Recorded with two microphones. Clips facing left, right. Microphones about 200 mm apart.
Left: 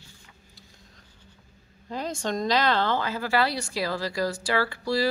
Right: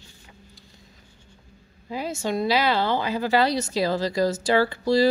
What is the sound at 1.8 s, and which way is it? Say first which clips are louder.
Speech: right 2 dB; 5° right (ahead or behind).